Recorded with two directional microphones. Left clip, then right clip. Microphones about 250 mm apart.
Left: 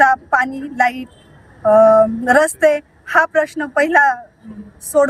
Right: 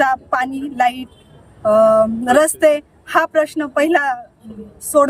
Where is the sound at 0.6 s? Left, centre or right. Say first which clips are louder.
Even; centre.